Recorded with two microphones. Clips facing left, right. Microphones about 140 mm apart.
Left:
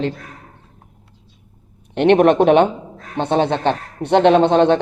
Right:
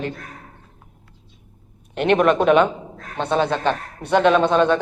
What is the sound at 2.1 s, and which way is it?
A man's voice, 55° left (ahead or behind).